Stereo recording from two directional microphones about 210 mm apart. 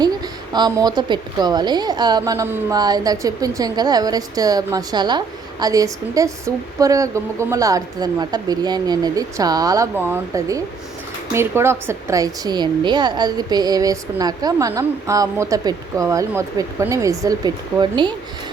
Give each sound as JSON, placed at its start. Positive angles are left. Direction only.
{"t": 0.5, "sound": "a woman's voice", "side_deg": -20}